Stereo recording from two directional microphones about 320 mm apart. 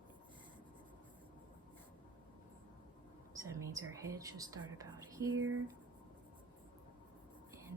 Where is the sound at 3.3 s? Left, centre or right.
Centre.